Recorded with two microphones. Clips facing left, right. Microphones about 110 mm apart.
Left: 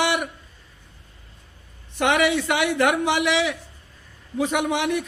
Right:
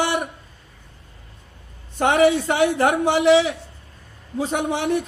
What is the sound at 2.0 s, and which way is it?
A man's voice, 40° right (ahead or behind).